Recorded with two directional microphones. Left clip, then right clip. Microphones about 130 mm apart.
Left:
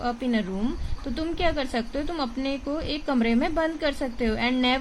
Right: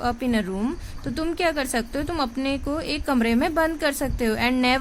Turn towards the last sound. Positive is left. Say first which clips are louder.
# right 3 dB
turn(degrees=-30)  # may be behind; listen again after turning